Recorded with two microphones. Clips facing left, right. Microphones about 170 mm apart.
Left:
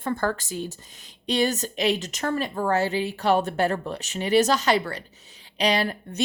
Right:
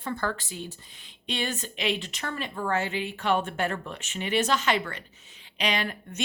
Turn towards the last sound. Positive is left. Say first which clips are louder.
# left 5 dB
turn(degrees=35)  # may be behind; listen again after turning